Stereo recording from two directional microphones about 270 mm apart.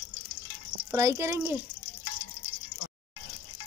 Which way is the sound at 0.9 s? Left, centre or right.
Centre.